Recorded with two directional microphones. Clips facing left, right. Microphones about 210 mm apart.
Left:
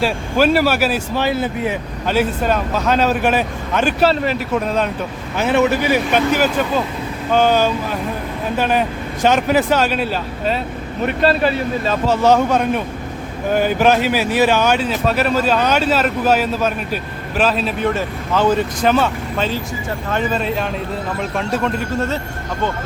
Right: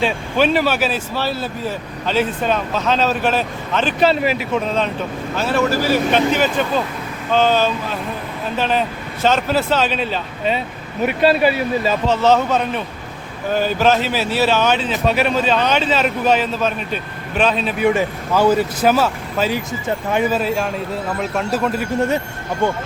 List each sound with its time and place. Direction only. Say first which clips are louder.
0.0 s speech: left 1 dB; 5° left (ahead or behind)
4.1 s speech: even; 5° right (ahead or behind)
12.0 s speech: left 3 dB; 10° left (ahead or behind)
17.7 s speech: right 3 dB; 10° right (ahead or behind)
21.9 s speech: right 3 dB; 15° right (ahead or behind)